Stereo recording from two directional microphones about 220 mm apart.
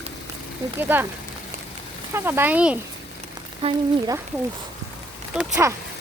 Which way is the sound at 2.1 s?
10° right (ahead or behind).